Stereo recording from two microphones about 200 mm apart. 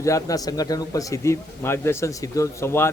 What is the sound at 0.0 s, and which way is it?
Speech, 15° left (ahead or behind).